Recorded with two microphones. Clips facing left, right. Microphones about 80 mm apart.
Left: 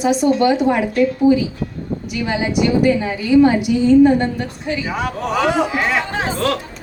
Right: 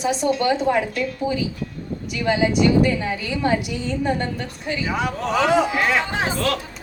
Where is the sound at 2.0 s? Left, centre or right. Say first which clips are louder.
Right 2 dB; centre.